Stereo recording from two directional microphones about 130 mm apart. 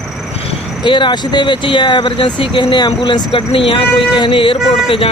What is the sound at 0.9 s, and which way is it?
Speech, 35° left (ahead or behind).